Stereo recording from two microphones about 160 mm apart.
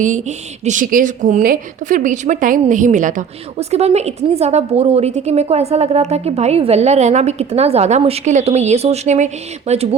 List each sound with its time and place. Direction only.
0.0 s a woman's voice: 50° right (ahead or behind)